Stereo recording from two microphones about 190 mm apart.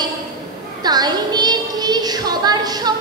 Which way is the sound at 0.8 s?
20° right (ahead or behind).